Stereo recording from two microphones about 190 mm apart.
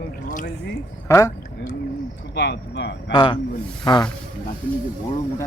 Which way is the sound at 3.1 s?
25° left (ahead or behind).